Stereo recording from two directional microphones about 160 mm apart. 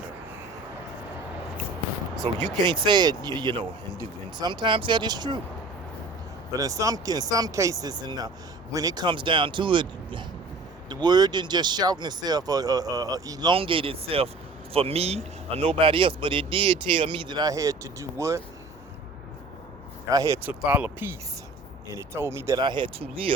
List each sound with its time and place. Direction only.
2.3 s speech: 40° right (ahead or behind)
6.5 s speech: 20° right (ahead or behind)
20.1 s speech: 20° right (ahead or behind)
20.5 s speech: 10° right (ahead or behind)
22.6 s speech: 30° right (ahead or behind)